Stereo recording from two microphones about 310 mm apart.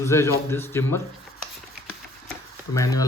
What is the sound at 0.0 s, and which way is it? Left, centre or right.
Speech, centre.